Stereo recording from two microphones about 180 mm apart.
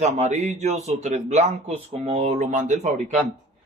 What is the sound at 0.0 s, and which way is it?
Speech, 40° right (ahead or behind).